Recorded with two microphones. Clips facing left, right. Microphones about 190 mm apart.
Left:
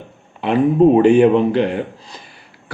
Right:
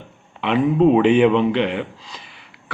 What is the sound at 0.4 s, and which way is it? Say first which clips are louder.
A man's voice: left 3 dB; 40° left (ahead or behind).